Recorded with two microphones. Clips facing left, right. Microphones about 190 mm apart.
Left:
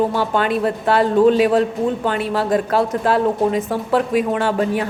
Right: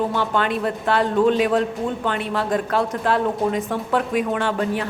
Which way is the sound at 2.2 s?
35° left (ahead or behind).